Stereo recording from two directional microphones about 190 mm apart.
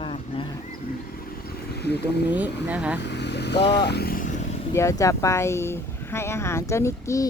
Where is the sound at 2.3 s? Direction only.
10° right (ahead or behind).